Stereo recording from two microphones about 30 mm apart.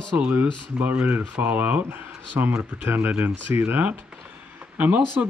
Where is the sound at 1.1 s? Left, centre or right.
Right.